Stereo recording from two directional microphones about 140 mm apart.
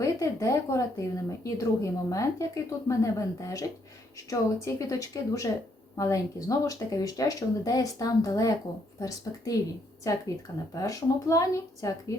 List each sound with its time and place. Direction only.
0.0 s speech: 25° left (ahead or behind)